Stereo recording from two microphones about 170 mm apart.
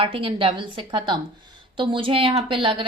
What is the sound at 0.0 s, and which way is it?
A woman's voice, 30° right (ahead or behind).